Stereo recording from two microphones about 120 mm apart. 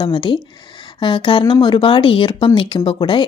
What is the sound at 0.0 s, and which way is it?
A woman's voice, 40° left (ahead or behind).